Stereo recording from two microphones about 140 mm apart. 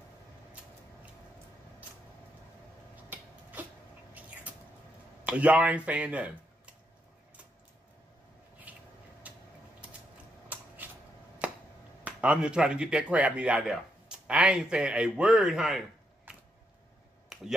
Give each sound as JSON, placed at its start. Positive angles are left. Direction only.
{"t": 5.2, "sound": "speech", "side_deg": -10}
{"t": 8.7, "sound": "a sound", "side_deg": -10}
{"t": 11.4, "sound": "chop", "side_deg": -10}
{"t": 12.0, "sound": "speech", "side_deg": -10}
{"t": 16.3, "sound": "a sound", "side_deg": -10}
{"t": 17.3, "sound": "finger snapping", "side_deg": 0}